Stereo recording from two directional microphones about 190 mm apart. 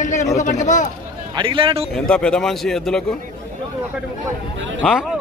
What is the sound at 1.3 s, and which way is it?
Speech, 25° right (ahead or behind).